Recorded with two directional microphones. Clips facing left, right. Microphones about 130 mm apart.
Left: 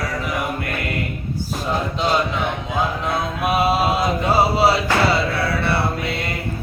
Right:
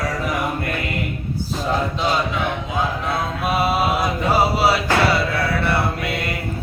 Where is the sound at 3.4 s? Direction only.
20° left (ahead or behind).